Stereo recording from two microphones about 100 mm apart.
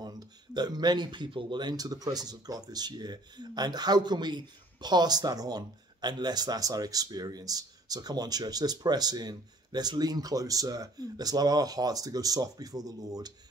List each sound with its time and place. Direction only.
0.0 s speech: 40° right (ahead or behind)